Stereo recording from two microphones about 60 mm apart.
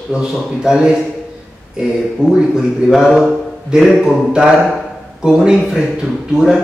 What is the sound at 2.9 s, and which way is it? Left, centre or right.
A man's voice, centre.